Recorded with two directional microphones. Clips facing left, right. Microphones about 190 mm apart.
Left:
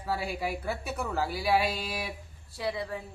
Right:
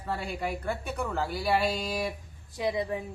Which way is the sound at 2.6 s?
20° right (ahead or behind).